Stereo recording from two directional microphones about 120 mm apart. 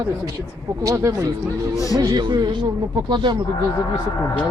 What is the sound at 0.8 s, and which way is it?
Speech, 25° right (ahead or behind).